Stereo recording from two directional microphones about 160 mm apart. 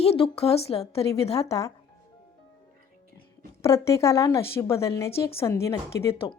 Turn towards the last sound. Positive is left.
turn(degrees=15)  # may be behind; listen again after turning